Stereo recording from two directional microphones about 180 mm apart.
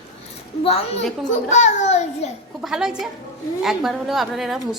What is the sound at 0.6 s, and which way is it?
A child's voice, 35° left (ahead or behind).